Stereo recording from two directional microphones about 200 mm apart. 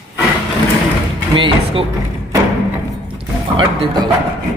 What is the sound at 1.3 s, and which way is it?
Speech, 25° right (ahead or behind).